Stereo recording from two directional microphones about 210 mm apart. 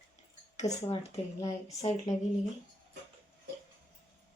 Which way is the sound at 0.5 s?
30° left (ahead or behind).